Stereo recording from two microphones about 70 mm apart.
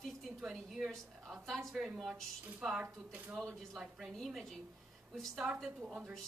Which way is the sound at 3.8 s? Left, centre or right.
Centre.